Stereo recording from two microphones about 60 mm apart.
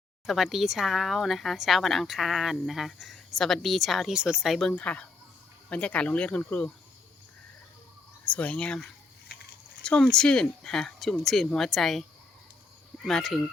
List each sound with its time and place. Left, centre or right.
0.3 s speech: centre
4.1 s speech: centre
4.8 s speech: left
8.2 s speech: left
9.8 s speech: centre
13.1 s speech: centre